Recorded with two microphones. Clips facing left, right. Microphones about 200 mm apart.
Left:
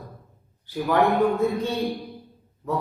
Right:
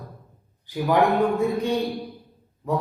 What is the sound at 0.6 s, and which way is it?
Speech, 15° right (ahead or behind).